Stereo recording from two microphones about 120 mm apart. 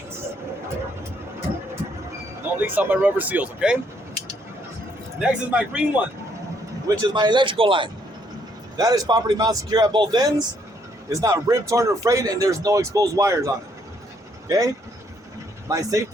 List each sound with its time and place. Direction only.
2.6 s speech: 15° right (ahead or behind)
5.2 s speech: 10° right (ahead or behind)
6.8 s a man's voice: 35° right (ahead or behind)
8.8 s a man's voice: 30° right (ahead or behind)
15.7 s speech: 30° right (ahead or behind)